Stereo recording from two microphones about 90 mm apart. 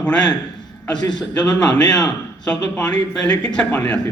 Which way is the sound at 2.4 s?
10° left (ahead or behind).